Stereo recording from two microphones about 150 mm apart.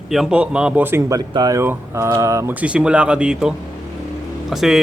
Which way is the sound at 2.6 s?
5° right (ahead or behind).